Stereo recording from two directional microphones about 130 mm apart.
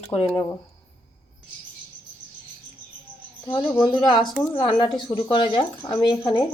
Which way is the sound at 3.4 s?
35° left (ahead or behind).